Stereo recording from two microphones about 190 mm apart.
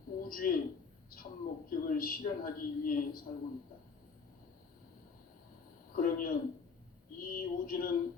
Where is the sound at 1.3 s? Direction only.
30° left (ahead or behind).